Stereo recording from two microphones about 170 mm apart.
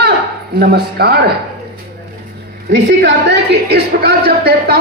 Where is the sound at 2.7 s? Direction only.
85° right.